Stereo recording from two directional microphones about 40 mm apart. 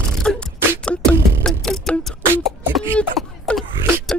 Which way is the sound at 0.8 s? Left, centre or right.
Left.